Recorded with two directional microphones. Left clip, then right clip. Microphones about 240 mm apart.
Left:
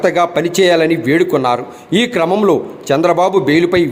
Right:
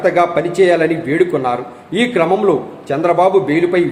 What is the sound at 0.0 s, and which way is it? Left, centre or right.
A man's voice, left.